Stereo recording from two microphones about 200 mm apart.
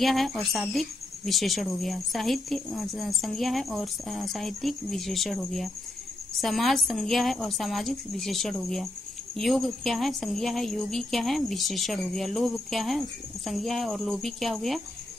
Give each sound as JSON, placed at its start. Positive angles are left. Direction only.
{"t": 0.0, "sound": "a woman's voice", "side_deg": 0}